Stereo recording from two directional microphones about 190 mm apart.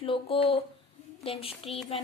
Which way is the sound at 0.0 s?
30° left (ahead or behind).